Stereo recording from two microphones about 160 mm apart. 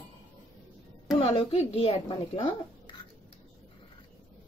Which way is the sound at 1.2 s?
35° left (ahead or behind).